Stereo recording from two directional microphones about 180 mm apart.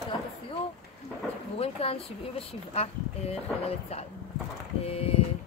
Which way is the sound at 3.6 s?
35° left (ahead or behind).